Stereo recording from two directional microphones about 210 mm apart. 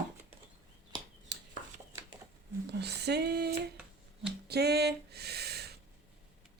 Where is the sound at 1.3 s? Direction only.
55° right (ahead or behind).